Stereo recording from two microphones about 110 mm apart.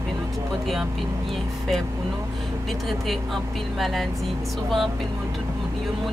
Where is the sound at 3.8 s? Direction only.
Centre (ahead or behind).